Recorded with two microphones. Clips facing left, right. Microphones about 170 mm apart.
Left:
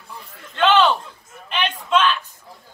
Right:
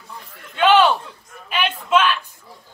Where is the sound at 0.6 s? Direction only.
10° right (ahead or behind).